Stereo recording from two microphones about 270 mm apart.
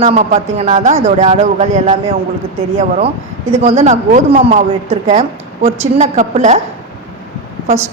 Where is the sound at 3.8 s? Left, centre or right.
Right.